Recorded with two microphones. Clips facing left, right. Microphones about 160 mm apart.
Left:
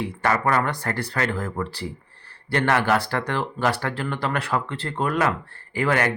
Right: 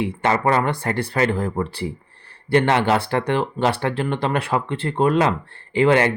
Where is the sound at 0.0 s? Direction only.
20° right (ahead or behind).